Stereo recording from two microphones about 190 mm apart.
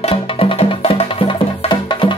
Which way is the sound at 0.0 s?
30° left (ahead or behind).